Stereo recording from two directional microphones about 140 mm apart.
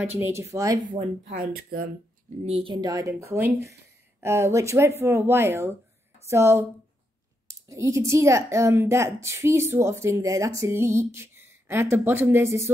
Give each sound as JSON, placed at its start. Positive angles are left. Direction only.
{"t": 0.0, "sound": "speech", "side_deg": -15}
{"t": 1.3, "sound": "speech", "side_deg": -90}
{"t": 2.4, "sound": "speech", "side_deg": -45}
{"t": 2.7, "sound": "speech", "side_deg": -25}